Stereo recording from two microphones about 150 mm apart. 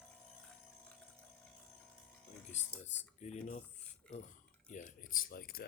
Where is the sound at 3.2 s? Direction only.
50° left (ahead or behind).